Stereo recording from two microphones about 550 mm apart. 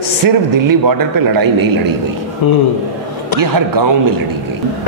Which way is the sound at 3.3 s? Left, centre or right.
Right.